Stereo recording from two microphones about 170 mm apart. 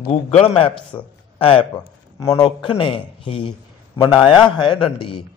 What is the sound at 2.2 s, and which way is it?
A man's voice, 20° left (ahead or behind).